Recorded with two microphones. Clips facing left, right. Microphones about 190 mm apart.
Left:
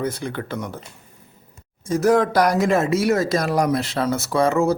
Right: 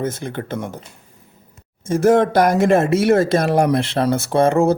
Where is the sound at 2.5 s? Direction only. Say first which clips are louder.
Right 4 dB; 55° right (ahead or behind).